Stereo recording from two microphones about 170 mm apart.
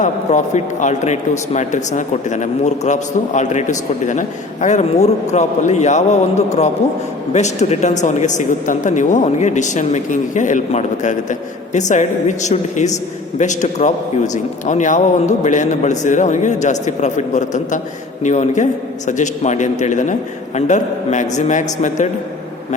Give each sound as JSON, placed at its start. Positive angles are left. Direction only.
{"t": 0.0, "sound": "a man's voice", "side_deg": 45}